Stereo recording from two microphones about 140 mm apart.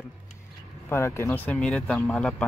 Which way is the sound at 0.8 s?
20° left (ahead or behind).